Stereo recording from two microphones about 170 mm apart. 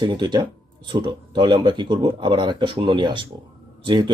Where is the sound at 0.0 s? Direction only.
25° right (ahead or behind).